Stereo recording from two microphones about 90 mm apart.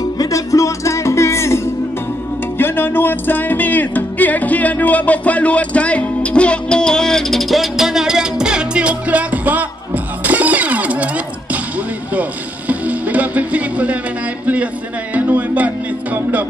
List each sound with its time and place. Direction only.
0.2 s music: 35° left (ahead or behind)
2.6 s music: 25° left (ahead or behind); by 11.1 s 15° right (ahead or behind)
12.1 s music: 15° right (ahead or behind)
14.4 s a sound: 15° right (ahead or behind)
15.1 s music: 20° right (ahead or behind)